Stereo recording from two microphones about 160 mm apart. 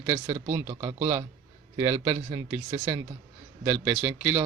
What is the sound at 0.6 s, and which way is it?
Speech, 20° right (ahead or behind).